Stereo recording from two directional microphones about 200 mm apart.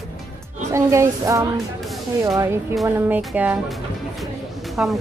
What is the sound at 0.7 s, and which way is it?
A woman's voice, 15° right (ahead or behind).